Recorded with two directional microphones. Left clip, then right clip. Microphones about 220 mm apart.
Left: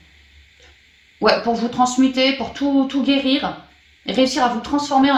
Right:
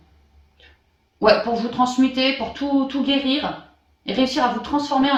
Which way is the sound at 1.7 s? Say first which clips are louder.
Left 2 dB; 35° left (ahead or behind).